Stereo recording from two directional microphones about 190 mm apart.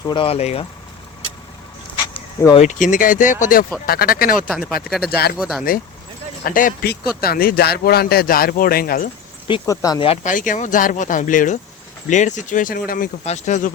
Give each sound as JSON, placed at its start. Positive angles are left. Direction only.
{"t": 0.0, "sound": "speech", "side_deg": 25}
{"t": 2.6, "sound": "speech", "side_deg": 40}
{"t": 4.4, "sound": "speech", "side_deg": 5}
{"t": 5.0, "sound": "speech", "side_deg": 55}
{"t": 5.4, "sound": "speech", "side_deg": -5}
{"t": 6.4, "sound": "speech", "side_deg": 45}
{"t": 9.5, "sound": "speech", "side_deg": 20}
{"t": 10.2, "sound": "speech", "side_deg": 45}
{"t": 13.2, "sound": "speech", "side_deg": 35}